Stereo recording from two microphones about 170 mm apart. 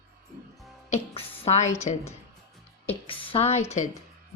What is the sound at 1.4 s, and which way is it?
Speech, 40° left (ahead or behind).